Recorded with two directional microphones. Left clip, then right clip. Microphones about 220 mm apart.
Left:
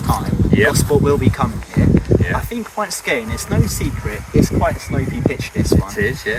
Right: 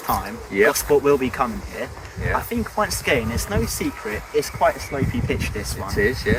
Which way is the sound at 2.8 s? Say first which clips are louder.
Left 1 dB; centre (ahead or behind).